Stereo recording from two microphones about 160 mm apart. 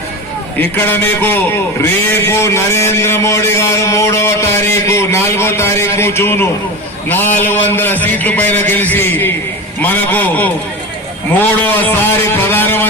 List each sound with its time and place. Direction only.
0.6 s a man's voice: 15° left (ahead or behind)